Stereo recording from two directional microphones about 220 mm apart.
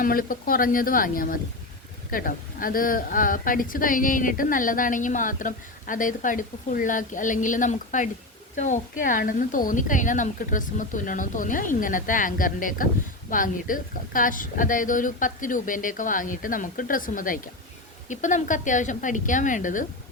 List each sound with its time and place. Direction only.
0.0 s a woman's voice: 40° left (ahead or behind)